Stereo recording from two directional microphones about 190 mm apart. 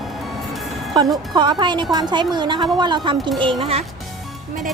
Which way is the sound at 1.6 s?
25° right (ahead or behind).